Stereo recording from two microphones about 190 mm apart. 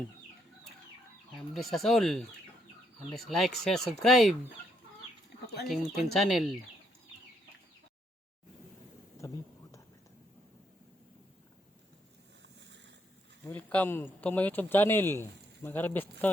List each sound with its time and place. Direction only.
1.4 s speech: centre (ahead or behind)
5.6 s speech: centre (ahead or behind)
9.2 s a sound: 15° left (ahead or behind)
12.4 s boat: 70° right (ahead or behind)
13.4 s speech: 10° left (ahead or behind)